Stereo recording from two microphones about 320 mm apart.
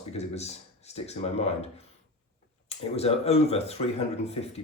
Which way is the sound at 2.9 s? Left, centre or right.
Centre.